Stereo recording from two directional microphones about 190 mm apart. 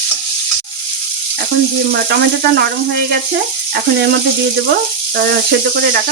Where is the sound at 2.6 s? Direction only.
60° right (ahead or behind).